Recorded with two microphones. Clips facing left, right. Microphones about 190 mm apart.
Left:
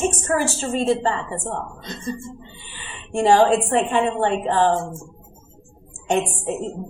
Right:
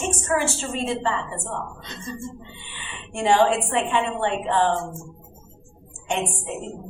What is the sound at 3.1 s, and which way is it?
A woman's voice, 40° left (ahead or behind).